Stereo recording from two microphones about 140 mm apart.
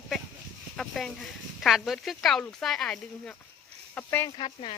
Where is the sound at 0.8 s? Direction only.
Centre (ahead or behind).